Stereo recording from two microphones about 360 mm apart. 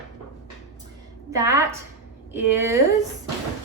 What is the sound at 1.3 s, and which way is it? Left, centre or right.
A woman's voice, centre.